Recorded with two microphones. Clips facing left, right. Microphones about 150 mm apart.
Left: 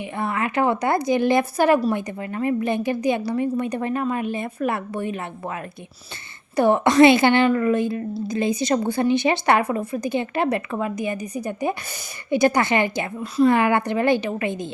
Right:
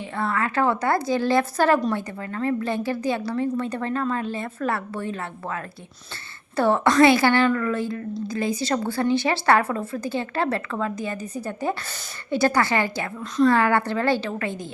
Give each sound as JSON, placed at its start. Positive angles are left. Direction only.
{"t": 0.0, "sound": "a woman's voice", "side_deg": 15}